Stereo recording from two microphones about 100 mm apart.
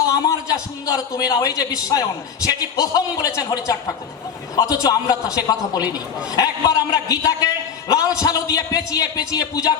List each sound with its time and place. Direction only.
0.0 s a man's voice: 35° left (ahead or behind)